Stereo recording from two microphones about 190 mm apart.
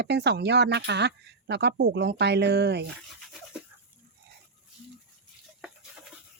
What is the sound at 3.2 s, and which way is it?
Toothbrush, 5° right (ahead or behind).